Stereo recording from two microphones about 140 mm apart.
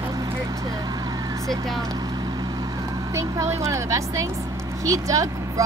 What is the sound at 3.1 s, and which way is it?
Speech, 20° right (ahead or behind).